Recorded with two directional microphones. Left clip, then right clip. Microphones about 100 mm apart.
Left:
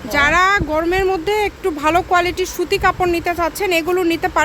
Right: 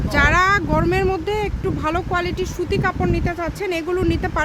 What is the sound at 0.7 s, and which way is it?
Speech, 5° left (ahead or behind).